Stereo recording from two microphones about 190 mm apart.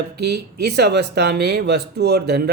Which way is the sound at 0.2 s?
60° right (ahead or behind).